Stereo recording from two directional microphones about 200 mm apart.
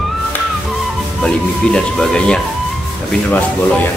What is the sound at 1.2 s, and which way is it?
Speech, 5° left (ahead or behind).